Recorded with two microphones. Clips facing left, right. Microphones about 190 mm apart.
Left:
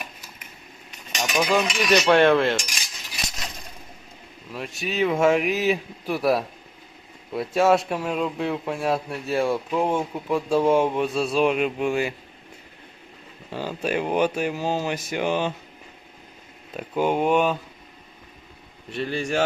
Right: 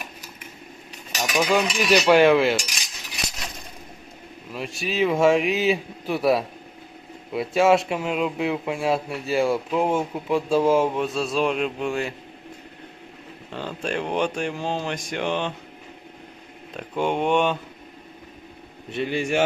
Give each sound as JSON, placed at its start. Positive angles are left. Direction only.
{"t": 1.1, "sound": "cutlery", "side_deg": -5}
{"t": 4.5, "sound": "speech", "side_deg": 0}
{"t": 5.5, "sound": "a man's voice", "side_deg": -25}
{"t": 5.7, "sound": "speech", "side_deg": 0}
{"t": 13.5, "sound": "speech", "side_deg": 5}
{"t": 16.7, "sound": "speech", "side_deg": 5}
{"t": 19.1, "sound": "speech", "side_deg": 0}